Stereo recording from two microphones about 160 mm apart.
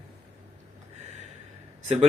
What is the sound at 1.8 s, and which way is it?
Speech, 45° right (ahead or behind).